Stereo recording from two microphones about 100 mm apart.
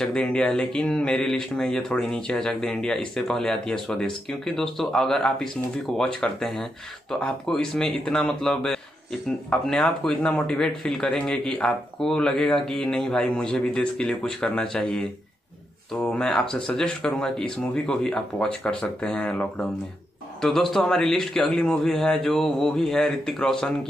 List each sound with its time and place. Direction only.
0.0 s a man's voice: 10° left (ahead or behind)